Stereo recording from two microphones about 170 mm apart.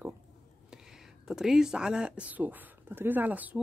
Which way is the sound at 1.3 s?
5° right (ahead or behind).